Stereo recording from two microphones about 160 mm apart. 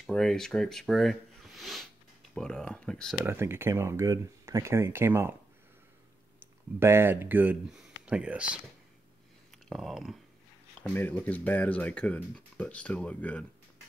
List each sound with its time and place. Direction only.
0.0 s speech: centre (ahead or behind)
3.3 s speech: 15° right (ahead or behind)
6.4 s speech: 15° right (ahead or behind)
9.7 s speech: centre (ahead or behind)
10.8 s speech: 10° left (ahead or behind)